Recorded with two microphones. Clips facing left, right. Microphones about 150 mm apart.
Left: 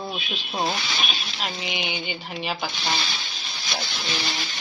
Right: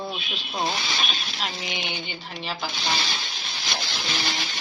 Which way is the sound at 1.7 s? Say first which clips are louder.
Left 3 dB; 15° left (ahead or behind).